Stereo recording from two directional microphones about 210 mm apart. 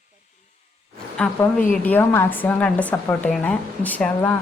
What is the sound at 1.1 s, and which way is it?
Speech, 5° left (ahead or behind).